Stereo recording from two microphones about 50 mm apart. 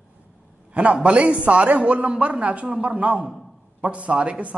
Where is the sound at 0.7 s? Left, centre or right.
Right.